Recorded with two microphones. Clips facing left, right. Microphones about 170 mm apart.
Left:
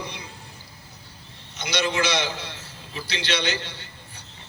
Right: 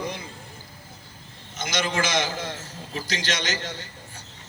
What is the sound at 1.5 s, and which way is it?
A man's voice, 45° right (ahead or behind).